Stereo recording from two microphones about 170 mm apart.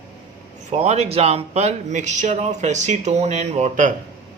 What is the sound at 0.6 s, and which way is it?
Speech, 40° right (ahead or behind).